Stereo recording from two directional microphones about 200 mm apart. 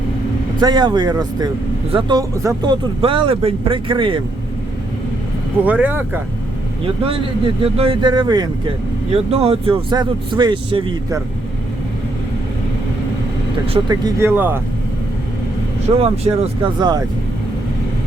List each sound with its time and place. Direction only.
0.6 s speech: 20° right (ahead or behind)
5.6 s speech: 10° right (ahead or behind)
6.8 s speech: 25° right (ahead or behind)
13.7 s speech: 20° right (ahead or behind)
16.0 s speech: 25° right (ahead or behind)